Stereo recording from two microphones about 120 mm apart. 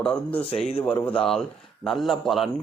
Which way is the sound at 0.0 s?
10° left (ahead or behind).